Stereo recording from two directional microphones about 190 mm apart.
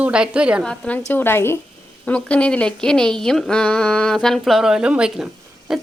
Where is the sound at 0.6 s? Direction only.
5° left (ahead or behind).